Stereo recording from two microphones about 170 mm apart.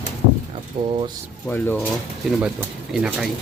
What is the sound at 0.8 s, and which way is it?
Speech, 25° right (ahead or behind).